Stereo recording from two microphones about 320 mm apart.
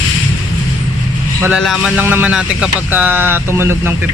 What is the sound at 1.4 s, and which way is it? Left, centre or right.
Speech, centre.